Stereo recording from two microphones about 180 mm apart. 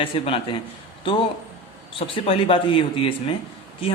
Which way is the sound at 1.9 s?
30° left (ahead or behind).